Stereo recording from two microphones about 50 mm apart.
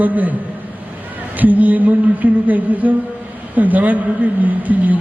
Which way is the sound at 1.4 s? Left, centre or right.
Right.